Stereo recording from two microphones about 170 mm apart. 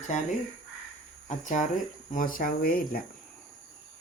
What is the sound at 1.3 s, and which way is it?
Speech, 45° left (ahead or behind).